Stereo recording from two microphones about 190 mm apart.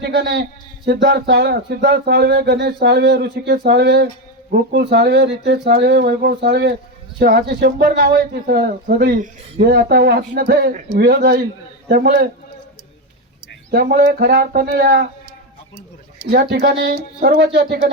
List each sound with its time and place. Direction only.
0.0 s speech: 60° right (ahead or behind)
13.7 s speech: 55° right (ahead or behind)
16.3 s speech: 55° right (ahead or behind)